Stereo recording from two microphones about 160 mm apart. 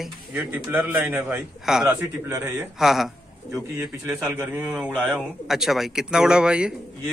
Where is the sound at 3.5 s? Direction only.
10° right (ahead or behind).